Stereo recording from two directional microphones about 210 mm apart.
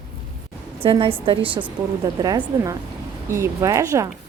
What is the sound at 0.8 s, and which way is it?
A woman's voice, 25° right (ahead or behind).